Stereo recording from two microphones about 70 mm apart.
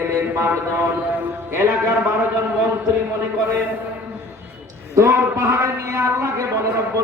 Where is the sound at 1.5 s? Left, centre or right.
Right.